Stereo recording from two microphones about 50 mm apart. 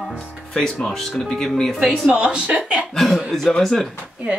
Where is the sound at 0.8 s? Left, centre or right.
Centre.